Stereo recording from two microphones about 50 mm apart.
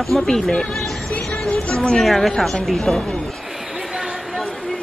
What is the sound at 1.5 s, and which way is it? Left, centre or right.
Speech, centre.